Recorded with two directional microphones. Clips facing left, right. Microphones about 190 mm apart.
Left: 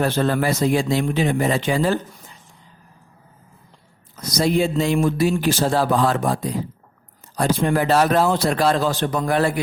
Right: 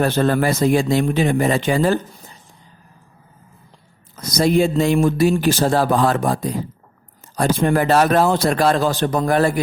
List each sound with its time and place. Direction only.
0.0 s speech: 50° right (ahead or behind)
4.4 s speech: 50° right (ahead or behind)